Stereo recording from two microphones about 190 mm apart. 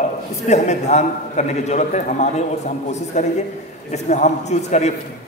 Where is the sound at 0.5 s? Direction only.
35° left (ahead or behind).